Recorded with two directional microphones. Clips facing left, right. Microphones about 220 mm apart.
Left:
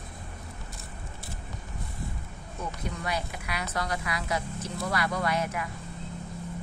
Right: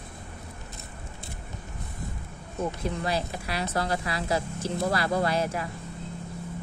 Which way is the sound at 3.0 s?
30° right (ahead or behind).